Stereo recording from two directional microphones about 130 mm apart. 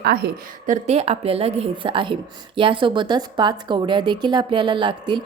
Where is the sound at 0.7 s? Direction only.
55° right (ahead or behind).